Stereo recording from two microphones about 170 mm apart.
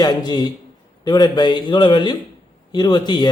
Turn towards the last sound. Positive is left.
turn(degrees=25)  # may be behind; listen again after turning